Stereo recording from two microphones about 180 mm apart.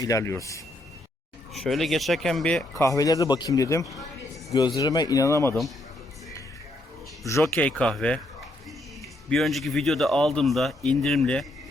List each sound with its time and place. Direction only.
0.0 s speech: 15° left (ahead or behind)
1.5 s speech: centre (ahead or behind)
2.7 s speech: 20° left (ahead or behind)
7.3 s speech: 15° left (ahead or behind)
9.3 s speech: centre (ahead or behind)